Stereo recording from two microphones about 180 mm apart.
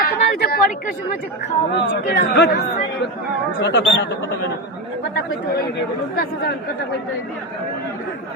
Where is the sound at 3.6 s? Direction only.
80° left.